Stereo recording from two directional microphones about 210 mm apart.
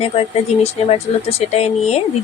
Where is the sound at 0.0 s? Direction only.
30° left (ahead or behind).